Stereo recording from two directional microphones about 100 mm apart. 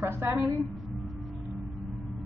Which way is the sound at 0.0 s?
25° right (ahead or behind).